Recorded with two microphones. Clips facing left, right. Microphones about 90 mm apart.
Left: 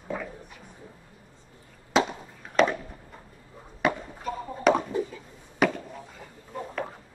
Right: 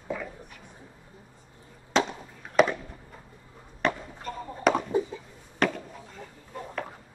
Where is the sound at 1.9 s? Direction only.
5° left (ahead or behind).